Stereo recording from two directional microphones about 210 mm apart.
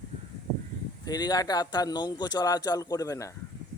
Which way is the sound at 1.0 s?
20° left (ahead or behind).